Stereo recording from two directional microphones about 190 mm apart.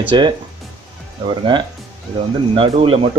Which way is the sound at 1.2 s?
25° right (ahead or behind).